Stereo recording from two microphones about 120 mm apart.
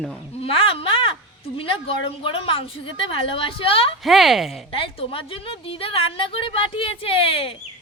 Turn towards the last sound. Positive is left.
turn(degrees=50)  # may be behind; listen again after turning